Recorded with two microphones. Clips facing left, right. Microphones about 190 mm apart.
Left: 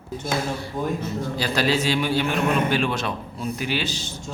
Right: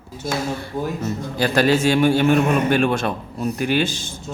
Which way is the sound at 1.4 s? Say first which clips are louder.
Right 6 dB; 50° right (ahead or behind).